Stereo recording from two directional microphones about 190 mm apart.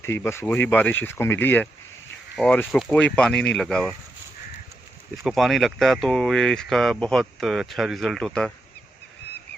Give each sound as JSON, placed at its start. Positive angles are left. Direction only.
{"t": 0.0, "sound": "speech", "side_deg": 15}
{"t": 5.2, "sound": "speech", "side_deg": 0}